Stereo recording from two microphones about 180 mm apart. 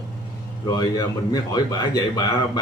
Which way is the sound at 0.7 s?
20° left (ahead or behind).